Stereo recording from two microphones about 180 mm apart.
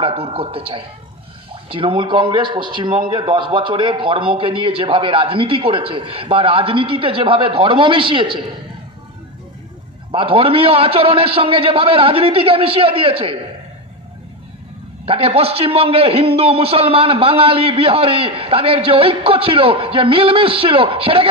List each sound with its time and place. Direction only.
0.0 s a man's voice: 30° right (ahead or behind)
10.1 s a man's voice: 30° right (ahead or behind)
15.0 s a man's voice: 30° right (ahead or behind)